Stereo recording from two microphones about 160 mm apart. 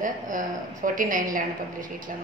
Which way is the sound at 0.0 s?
55° right (ahead or behind).